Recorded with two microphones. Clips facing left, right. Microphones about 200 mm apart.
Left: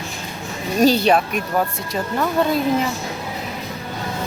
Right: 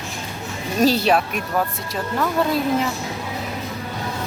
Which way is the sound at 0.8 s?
Centre (ahead or behind).